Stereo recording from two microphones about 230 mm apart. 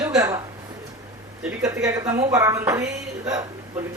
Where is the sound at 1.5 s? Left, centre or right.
Centre.